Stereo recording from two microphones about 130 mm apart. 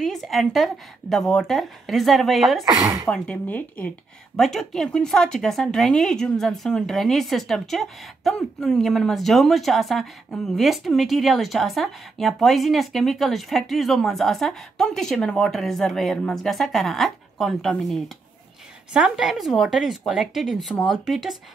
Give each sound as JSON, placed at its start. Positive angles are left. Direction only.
{"t": 0.0, "sound": "speech", "side_deg": 0}
{"t": 2.6, "sound": "speech", "side_deg": -25}
{"t": 3.1, "sound": "speech", "side_deg": 10}
{"t": 4.4, "sound": "speech", "side_deg": 0}